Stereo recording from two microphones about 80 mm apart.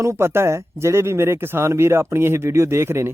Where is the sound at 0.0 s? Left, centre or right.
Right.